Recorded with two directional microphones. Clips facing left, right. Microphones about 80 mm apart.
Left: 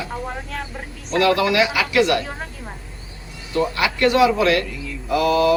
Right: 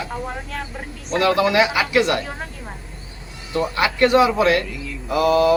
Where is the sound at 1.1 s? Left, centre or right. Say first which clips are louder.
Even; right.